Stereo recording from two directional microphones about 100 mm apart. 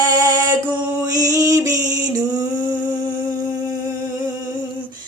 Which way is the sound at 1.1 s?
35° right (ahead or behind).